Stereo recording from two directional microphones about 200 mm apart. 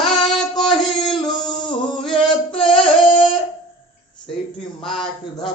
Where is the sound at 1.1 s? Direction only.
5° left (ahead or behind).